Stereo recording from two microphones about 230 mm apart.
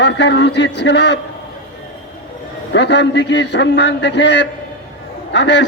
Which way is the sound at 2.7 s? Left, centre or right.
Left.